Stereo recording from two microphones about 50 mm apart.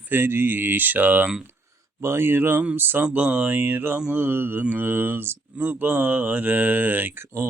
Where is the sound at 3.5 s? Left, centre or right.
Right.